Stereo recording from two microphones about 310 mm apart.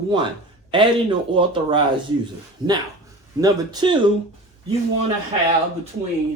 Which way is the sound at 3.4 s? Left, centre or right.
Centre.